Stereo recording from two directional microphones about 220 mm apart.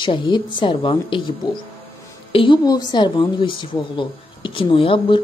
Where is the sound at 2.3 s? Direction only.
25° left (ahead or behind).